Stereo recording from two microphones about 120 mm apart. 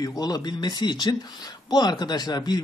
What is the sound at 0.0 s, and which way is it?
Speech, 30° left (ahead or behind).